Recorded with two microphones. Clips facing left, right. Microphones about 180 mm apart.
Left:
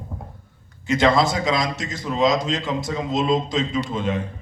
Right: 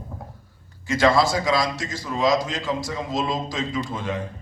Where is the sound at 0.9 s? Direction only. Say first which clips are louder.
Left 1 dB; 20° left (ahead or behind).